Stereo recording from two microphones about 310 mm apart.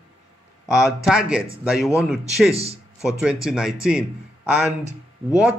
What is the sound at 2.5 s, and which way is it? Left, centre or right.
Speech, centre.